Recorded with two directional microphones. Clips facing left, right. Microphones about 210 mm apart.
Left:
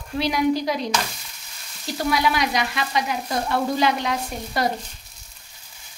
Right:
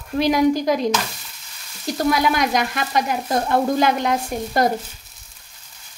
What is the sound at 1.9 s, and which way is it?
Frying, 45° right (ahead or behind).